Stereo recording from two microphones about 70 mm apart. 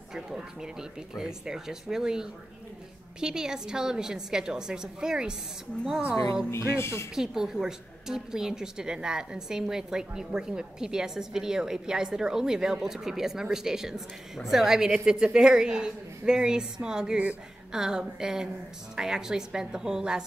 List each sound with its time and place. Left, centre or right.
0.1 s a woman's voice: centre
6.5 s music: left
7.2 s a woman's voice: centre